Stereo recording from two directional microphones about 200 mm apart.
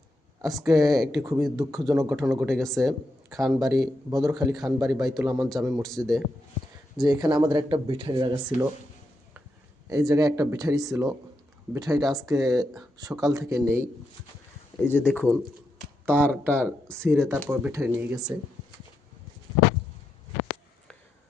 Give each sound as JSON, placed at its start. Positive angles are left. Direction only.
{"t": 0.6, "sound": "speech", "side_deg": -20}
{"t": 2.6, "sound": "a man's voice", "side_deg": 0}
{"t": 3.6, "sound": "speech", "side_deg": -20}
{"t": 5.8, "sound": "a man's voice", "side_deg": 0}
{"t": 6.9, "sound": "speech", "side_deg": -20}
{"t": 8.5, "sound": "speech", "side_deg": 40}
{"t": 9.9, "sound": "speech", "side_deg": -20}
{"t": 14.8, "sound": "speech", "side_deg": 10}
{"t": 17.0, "sound": "speech", "side_deg": -10}